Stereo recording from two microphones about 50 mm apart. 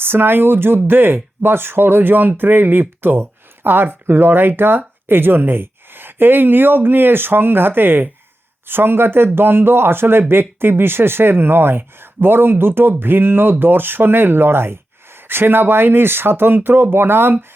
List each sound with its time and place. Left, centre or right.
0.0 s a man's voice: right